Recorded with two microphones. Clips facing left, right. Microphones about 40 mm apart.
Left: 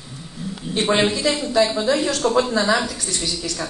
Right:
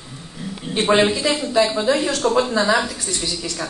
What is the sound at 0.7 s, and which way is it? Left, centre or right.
A woman's voice, centre.